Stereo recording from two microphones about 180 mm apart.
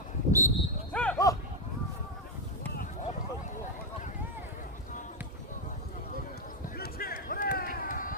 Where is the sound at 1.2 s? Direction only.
20° left (ahead or behind).